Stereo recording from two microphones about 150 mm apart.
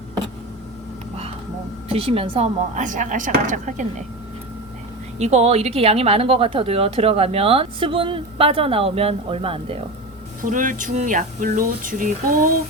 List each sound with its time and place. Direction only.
1.9 s speech: 40° right (ahead or behind)
2.7 s speech: 60° right (ahead or behind)
5.2 s speech: 45° right (ahead or behind)
10.4 s speech: 60° right (ahead or behind)